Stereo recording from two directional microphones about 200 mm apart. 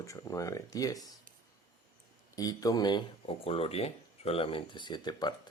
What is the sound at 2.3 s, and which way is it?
Speech, 20° left (ahead or behind).